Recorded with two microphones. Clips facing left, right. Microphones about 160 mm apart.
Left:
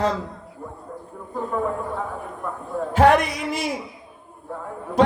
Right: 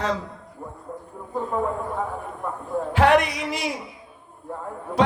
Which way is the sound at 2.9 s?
45° left (ahead or behind).